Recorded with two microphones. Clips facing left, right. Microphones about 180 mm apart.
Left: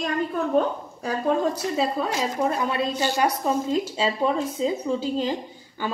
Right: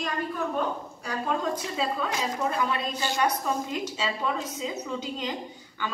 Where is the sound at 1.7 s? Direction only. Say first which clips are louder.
Left 4 dB; 35° left (ahead or behind).